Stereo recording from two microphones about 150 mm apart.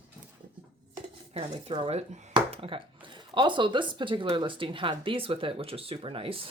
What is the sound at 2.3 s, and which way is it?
Speech, 35° right (ahead or behind).